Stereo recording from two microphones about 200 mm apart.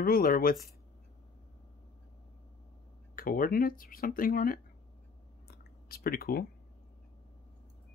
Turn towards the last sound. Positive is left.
turn(degrees=50)  # may be behind; listen again after turning